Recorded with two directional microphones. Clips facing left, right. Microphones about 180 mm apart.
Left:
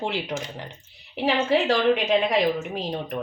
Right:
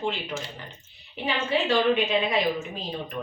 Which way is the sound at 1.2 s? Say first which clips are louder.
Left 4 dB; 85° left.